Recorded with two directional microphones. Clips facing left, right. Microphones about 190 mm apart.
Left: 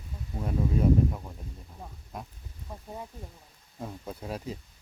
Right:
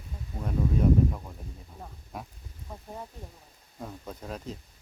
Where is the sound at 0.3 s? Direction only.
5° left (ahead or behind).